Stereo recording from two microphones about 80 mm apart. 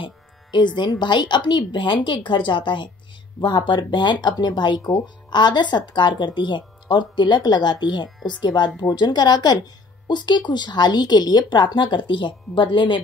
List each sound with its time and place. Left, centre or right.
0.0 s music: left
0.7 s speech: left
3.3 s speech: left